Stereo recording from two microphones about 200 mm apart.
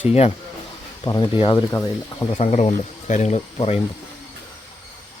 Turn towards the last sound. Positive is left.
turn(degrees=30)  # may be behind; listen again after turning